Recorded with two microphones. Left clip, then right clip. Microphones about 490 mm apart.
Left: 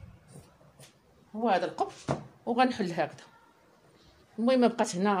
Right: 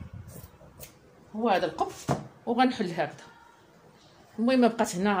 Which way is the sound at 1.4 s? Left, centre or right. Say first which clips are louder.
Right 2 dB; left.